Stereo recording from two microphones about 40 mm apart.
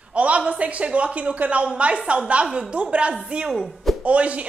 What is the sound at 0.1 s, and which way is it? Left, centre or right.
A woman's voice, right.